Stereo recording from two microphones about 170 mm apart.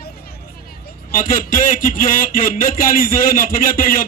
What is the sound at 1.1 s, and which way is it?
A man's voice, 50° left (ahead or behind).